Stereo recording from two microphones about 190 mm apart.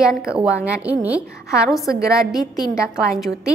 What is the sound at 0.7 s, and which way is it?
A woman's voice, 5° right (ahead or behind).